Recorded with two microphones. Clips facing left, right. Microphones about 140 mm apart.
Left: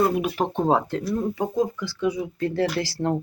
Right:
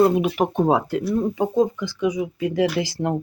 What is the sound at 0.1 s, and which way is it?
Speech, 20° right (ahead or behind).